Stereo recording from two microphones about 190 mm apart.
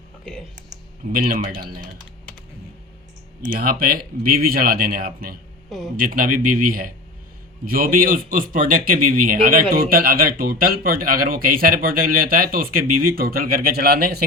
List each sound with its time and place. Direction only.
1.1 s speech: 50° right (ahead or behind)
3.6 s speech: 50° right (ahead or behind)